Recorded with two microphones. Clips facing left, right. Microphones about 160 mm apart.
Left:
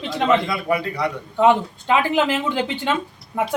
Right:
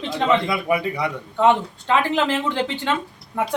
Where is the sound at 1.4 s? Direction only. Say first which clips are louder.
Left 1 dB; 15° left (ahead or behind).